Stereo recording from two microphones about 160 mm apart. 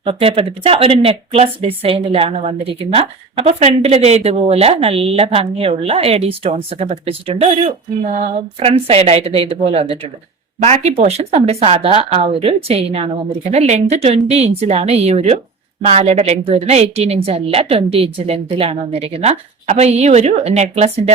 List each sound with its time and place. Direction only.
0.0 s speech: 35° right (ahead or behind)